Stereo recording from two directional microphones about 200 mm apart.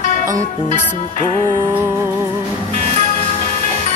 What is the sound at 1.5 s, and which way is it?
Music, 15° right (ahead or behind).